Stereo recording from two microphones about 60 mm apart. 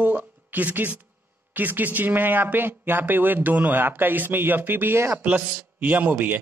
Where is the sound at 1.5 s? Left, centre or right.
Right.